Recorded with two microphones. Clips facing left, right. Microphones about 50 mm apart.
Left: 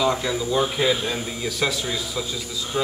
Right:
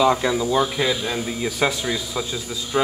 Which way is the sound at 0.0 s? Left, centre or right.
Centre.